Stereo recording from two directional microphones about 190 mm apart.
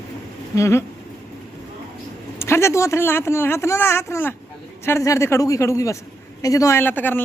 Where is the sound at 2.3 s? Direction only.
15° left (ahead or behind).